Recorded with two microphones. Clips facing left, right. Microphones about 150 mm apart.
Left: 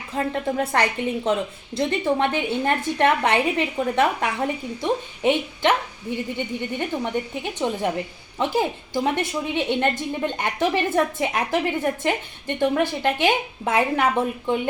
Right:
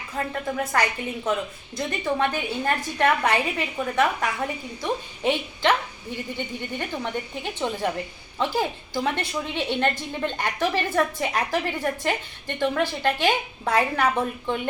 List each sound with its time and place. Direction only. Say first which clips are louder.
0.1 s a woman's voice: left 4 dB; 25° left (ahead or behind)